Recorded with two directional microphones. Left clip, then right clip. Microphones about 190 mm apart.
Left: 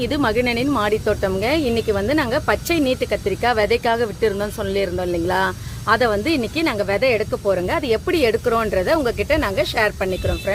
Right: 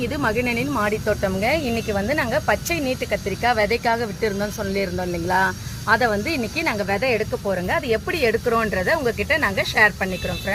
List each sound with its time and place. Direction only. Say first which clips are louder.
0.0 s speech: left 3 dB; 50° left (ahead or behind)